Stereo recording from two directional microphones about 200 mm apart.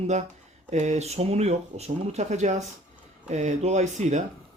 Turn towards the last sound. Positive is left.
turn(degrees=-35)  # may be behind; listen again after turning